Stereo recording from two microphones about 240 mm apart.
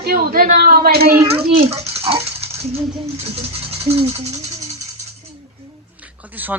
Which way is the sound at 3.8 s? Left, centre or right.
Right.